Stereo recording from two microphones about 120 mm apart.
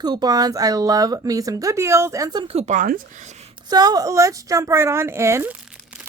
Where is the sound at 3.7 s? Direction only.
35° right (ahead or behind).